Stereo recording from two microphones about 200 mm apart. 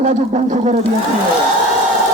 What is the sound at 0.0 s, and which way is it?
Speech, 35° right (ahead or behind).